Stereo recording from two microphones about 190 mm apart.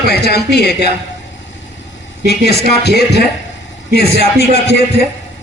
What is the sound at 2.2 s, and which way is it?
A man's voice, 60° left (ahead or behind).